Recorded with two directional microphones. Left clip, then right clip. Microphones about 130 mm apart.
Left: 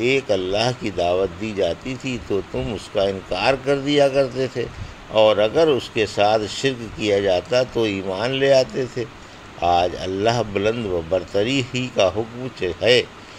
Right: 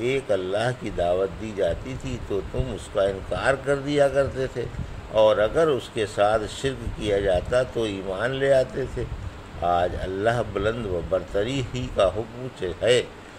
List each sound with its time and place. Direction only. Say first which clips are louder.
0.0 s speech: left 5 dB; 20° left (ahead or behind)